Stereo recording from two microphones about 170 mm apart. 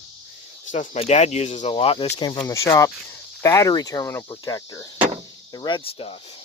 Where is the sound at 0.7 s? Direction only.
45° left (ahead or behind).